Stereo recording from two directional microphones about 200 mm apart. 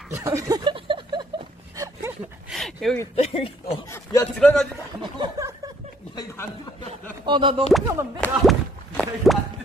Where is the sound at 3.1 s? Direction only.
30° left (ahead or behind).